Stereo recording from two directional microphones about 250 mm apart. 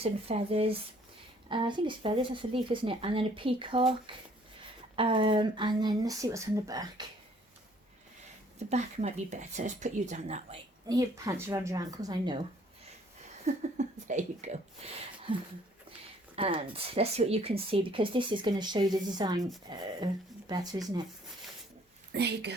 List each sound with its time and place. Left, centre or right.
0.0 s speech: right
4.9 s speech: centre
8.5 s speech: right
10.8 s speech: centre
13.4 s speech: right
22.1 s a woman's voice: right